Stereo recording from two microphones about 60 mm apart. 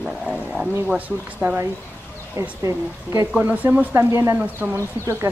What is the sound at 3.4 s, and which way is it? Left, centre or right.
Speech, right.